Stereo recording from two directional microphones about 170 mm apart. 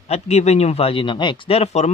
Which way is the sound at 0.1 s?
40° left (ahead or behind).